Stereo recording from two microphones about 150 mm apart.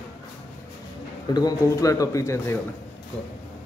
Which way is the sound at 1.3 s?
25° left (ahead or behind).